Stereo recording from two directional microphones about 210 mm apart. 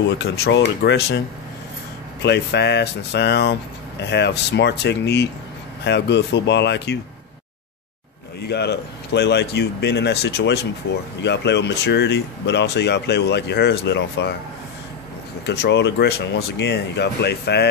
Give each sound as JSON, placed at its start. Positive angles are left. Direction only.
{"t": 0.1, "sound": "speech", "side_deg": 55}
{"t": 2.2, "sound": "speech", "side_deg": 55}
{"t": 8.4, "sound": "speech", "side_deg": 50}
{"t": 15.4, "sound": "speech", "side_deg": 55}